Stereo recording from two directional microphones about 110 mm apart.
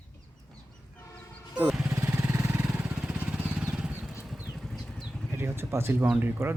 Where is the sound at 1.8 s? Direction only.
20° right (ahead or behind).